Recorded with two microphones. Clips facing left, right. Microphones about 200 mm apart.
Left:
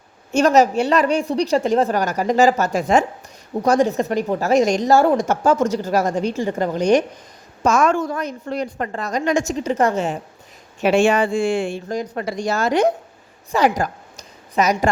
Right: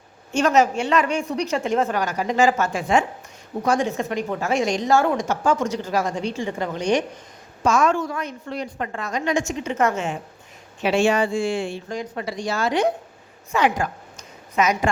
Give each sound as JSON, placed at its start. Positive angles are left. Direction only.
{"t": 0.3, "sound": "a woman's voice", "side_deg": 40}
{"t": 10.8, "sound": "speech", "side_deg": 50}
{"t": 13.5, "sound": "a sound", "side_deg": 40}